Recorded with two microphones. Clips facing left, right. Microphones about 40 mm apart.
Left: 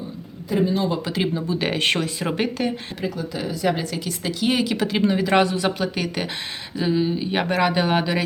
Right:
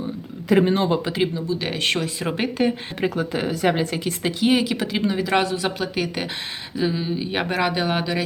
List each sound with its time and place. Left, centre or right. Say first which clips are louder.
0.6 s speech: left 3 dB; right
1.3 s speech: left 2 dB; centre
3.0 s speech: right 5 dB; right
3.8 s speech: right 3 dB; right
4.4 s speech: right 1 dB; centre